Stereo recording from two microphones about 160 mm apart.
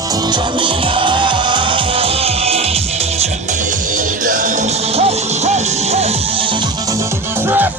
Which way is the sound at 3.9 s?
55° right (ahead or behind).